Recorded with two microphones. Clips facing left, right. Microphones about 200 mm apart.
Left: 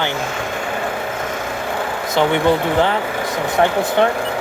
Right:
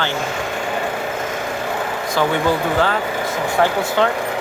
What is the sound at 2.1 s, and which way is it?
Speech, 20° left (ahead or behind).